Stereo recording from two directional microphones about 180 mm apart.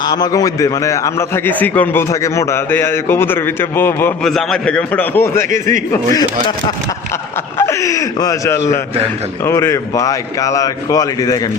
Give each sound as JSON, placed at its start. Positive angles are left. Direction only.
{"t": 0.0, "sound": "a man's voice", "side_deg": 20}
{"t": 5.5, "sound": "a man's voice", "side_deg": -45}
{"t": 7.6, "sound": "a man's voice", "side_deg": 15}